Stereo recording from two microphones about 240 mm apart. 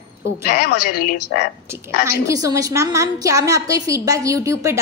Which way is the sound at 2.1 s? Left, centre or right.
Centre.